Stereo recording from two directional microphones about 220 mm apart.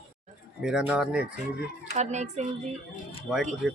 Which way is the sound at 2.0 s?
30° right (ahead or behind).